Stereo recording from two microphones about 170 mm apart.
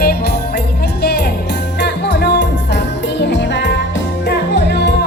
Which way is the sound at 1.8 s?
90° left.